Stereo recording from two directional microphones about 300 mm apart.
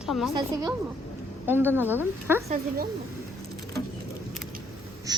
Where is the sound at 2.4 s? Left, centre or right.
Right.